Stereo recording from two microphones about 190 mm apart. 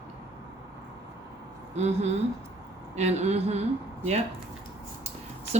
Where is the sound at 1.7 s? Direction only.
35° right (ahead or behind).